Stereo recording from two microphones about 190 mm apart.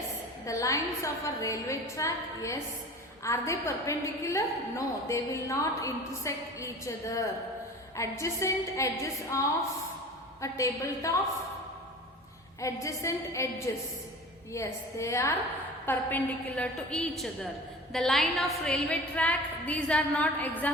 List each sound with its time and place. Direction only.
0.4 s a woman's voice: 15° left (ahead or behind)
10.4 s a woman's voice: 15° left (ahead or behind)
12.5 s a woman's voice: 15° left (ahead or behind)